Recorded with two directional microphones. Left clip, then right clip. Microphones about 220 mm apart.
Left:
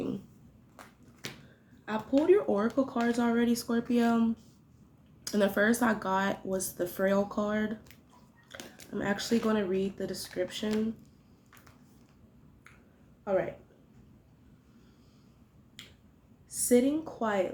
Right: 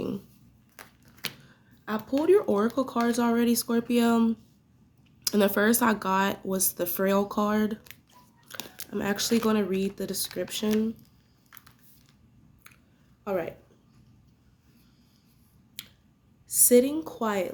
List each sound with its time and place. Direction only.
1.2 s a sound: 25° right (ahead or behind)
1.8 s a sound: 50° right (ahead or behind)
2.2 s speech: 50° right (ahead or behind)
13.3 s speech: 55° right (ahead or behind)
15.8 s finger snapping: 55° right (ahead or behind)
16.5 s speech: 55° right (ahead or behind)